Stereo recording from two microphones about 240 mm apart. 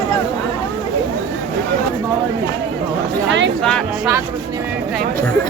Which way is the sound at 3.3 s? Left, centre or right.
Right.